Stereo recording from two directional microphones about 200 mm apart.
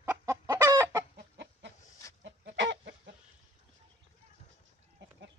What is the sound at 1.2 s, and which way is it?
Chicken, 60° right (ahead or behind).